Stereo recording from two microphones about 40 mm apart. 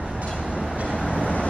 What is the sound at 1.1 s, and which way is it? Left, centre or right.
Vehicle, left.